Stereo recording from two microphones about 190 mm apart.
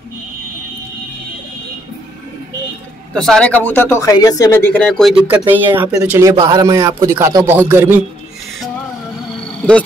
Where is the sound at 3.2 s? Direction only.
5° left (ahead or behind).